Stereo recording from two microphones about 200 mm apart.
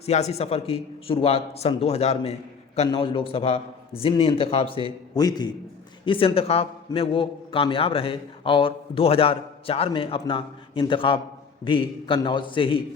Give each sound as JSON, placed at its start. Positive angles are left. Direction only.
{"t": 0.0, "sound": "a man's voice", "side_deg": 35}